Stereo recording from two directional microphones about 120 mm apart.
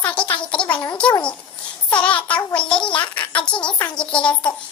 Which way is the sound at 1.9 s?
10° left (ahead or behind).